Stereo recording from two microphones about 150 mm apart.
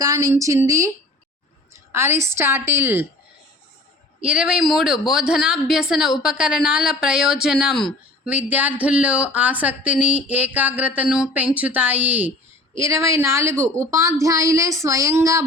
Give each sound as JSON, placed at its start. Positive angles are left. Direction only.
{"t": 0.0, "sound": "a woman's voice", "side_deg": -25}
{"t": 1.7, "sound": "speech", "side_deg": -15}
{"t": 4.2, "sound": "a woman's voice", "side_deg": -5}
{"t": 8.3, "sound": "a woman's voice", "side_deg": -10}